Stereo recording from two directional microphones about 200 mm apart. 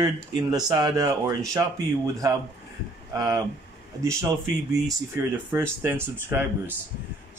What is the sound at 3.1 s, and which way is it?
Speech, 15° right (ahead or behind).